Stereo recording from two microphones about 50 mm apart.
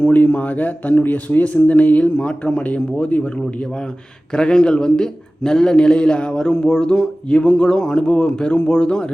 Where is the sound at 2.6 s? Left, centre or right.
Left.